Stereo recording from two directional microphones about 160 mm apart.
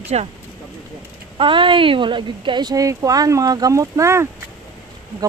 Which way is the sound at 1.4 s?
30° right (ahead or behind).